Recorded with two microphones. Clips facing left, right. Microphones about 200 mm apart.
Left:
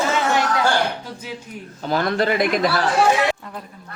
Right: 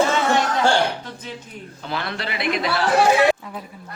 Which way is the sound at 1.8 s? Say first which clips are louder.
Left 8 dB; 45° left (ahead or behind).